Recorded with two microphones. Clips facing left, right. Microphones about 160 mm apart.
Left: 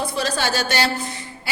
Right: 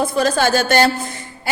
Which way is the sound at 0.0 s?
50° right (ahead or behind).